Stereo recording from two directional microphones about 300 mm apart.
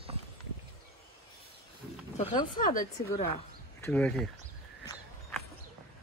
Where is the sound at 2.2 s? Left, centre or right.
Centre.